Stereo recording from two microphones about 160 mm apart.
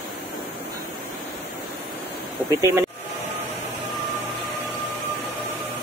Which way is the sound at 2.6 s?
15° right (ahead or behind).